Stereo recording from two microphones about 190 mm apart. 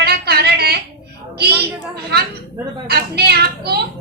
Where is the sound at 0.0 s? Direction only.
55° right (ahead or behind).